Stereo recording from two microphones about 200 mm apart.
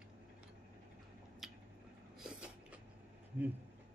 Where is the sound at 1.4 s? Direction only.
Centre (ahead or behind).